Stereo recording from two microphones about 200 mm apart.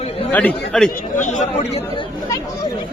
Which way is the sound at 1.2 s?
35° left (ahead or behind).